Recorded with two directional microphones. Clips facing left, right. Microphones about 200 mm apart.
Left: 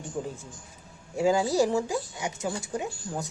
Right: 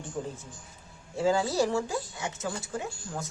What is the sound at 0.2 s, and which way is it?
A woman's voice, 10° left (ahead or behind).